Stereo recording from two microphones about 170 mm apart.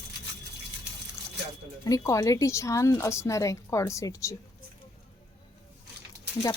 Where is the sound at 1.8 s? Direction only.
20° left (ahead or behind).